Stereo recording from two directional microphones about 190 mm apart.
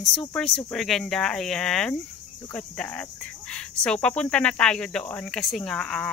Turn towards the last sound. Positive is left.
turn(degrees=5)  # may be behind; listen again after turning